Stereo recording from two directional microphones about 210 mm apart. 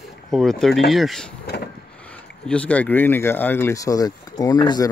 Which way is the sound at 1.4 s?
50° left (ahead or behind).